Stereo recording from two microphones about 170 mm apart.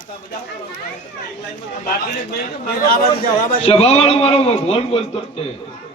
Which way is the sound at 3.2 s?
55° left (ahead or behind).